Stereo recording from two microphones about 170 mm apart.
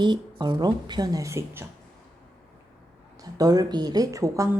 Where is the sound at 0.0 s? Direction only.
25° right (ahead or behind).